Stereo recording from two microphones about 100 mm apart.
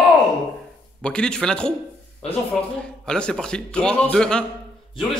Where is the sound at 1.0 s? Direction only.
10° left (ahead or behind).